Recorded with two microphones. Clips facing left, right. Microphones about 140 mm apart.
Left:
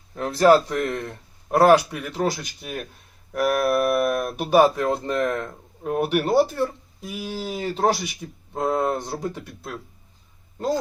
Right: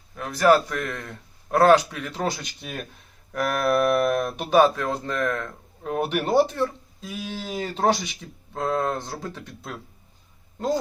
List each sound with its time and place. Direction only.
0.1 s speech: 25° left (ahead or behind)
5.8 s speech: 5° left (ahead or behind)